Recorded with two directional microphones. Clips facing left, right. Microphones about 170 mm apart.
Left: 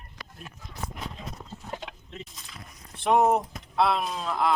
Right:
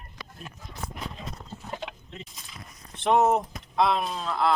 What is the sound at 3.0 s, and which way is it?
Speech, 10° left (ahead or behind).